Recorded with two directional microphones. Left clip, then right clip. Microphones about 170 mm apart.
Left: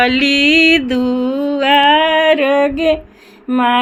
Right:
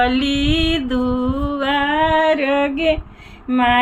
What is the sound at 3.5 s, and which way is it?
Speech, 25° left (ahead or behind).